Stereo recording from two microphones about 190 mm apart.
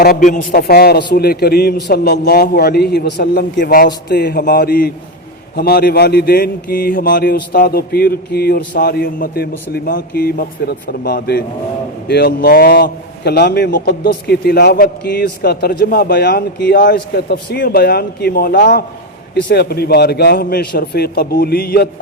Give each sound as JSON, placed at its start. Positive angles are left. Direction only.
{"t": 0.0, "sound": "a man's voice", "side_deg": 45}
{"t": 16.7, "sound": "speech", "side_deg": 50}
{"t": 19.3, "sound": "a man's voice", "side_deg": 60}